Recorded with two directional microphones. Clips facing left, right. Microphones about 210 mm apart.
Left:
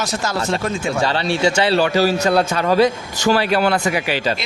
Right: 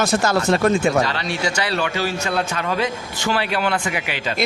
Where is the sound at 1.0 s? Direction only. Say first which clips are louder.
Left 5 dB; 30° left (ahead or behind).